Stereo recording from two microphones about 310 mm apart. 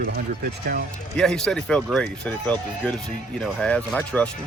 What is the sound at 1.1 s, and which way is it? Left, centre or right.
Speech, centre.